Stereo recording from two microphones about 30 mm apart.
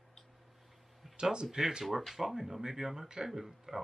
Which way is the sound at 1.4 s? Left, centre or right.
Centre.